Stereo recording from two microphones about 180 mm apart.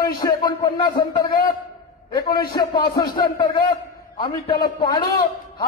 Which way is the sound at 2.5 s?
25° left (ahead or behind).